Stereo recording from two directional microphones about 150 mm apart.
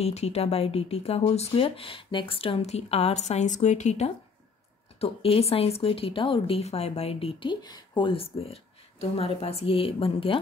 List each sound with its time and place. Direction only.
0.0 s a woman's voice: 45° left (ahead or behind)